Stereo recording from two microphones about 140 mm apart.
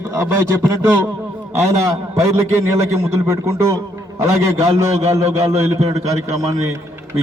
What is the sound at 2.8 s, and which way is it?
A man's voice, 20° right (ahead or behind).